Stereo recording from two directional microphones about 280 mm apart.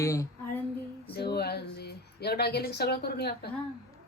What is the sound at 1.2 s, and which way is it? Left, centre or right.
Speech, left.